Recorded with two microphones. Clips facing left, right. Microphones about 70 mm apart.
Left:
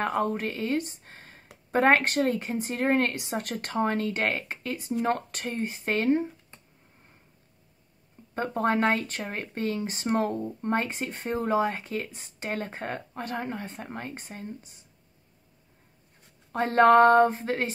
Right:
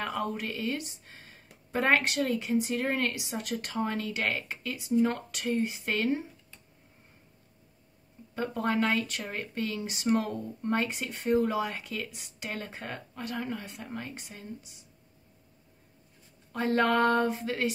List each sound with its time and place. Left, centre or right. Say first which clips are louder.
0.0 s speech: left 6 dB; left
8.4 s speech: left 3 dB; left
16.5 s speech: left 7 dB; left